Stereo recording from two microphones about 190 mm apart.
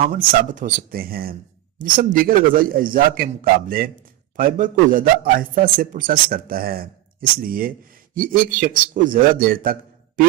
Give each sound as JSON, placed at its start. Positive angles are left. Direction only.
{"t": 0.3, "sound": "speech", "side_deg": -45}